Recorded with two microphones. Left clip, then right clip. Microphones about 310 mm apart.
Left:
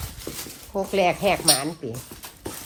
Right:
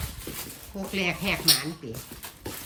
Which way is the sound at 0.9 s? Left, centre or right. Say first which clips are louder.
Left 7 dB; centre.